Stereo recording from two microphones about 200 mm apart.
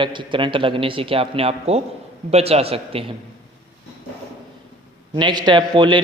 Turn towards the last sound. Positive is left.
turn(degrees=-25)  # may be behind; listen again after turning